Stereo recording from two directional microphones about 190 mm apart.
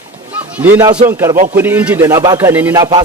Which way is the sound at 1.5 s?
10° right (ahead or behind).